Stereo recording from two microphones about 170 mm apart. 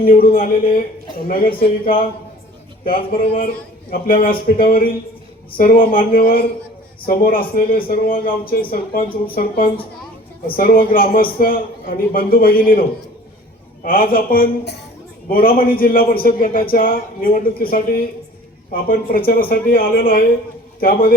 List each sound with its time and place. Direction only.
0.0 s a man's voice: 60° left (ahead or behind)
13.8 s a man's voice: 60° left (ahead or behind)